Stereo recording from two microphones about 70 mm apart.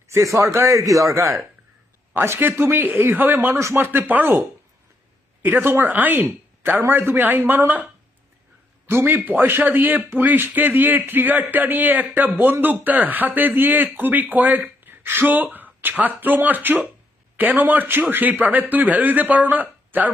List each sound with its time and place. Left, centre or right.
0.1 s speech: right
2.1 s speech: right
8.9 s speech: right
9.1 s speech: right